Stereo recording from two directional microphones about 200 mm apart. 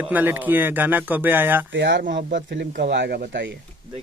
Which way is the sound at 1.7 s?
60° right (ahead or behind).